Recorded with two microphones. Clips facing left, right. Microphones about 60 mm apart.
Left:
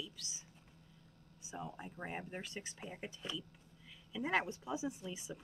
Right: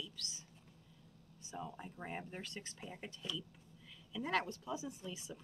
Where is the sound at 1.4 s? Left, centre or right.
Centre.